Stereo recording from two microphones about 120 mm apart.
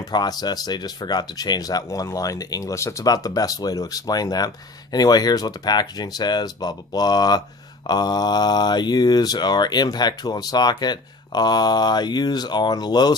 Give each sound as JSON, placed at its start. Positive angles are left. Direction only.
{"t": 0.1, "sound": "speech", "side_deg": 35}